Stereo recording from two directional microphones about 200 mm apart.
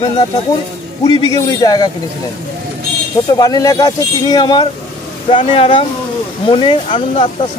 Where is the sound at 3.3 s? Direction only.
20° left (ahead or behind).